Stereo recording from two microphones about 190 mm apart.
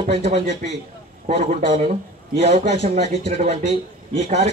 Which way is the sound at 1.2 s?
30° right (ahead or behind).